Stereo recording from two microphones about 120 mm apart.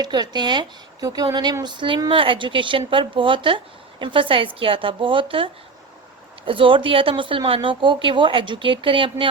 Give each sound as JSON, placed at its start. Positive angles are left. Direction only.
{"t": 0.0, "sound": "a woman's voice", "side_deg": -35}